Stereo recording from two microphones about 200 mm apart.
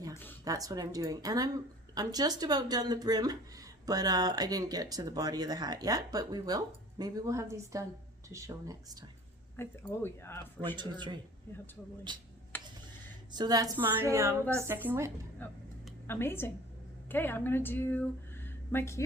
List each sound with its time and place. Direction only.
0.4 s a woman's voice: 15° right (ahead or behind)
9.6 s speech: 10° left (ahead or behind)
10.8 s a woman's voice: 20° right (ahead or behind)
13.3 s a woman's voice: 20° right (ahead or behind)
16.0 s speech: 10° left (ahead or behind)
18.4 s a sound: 10° left (ahead or behind)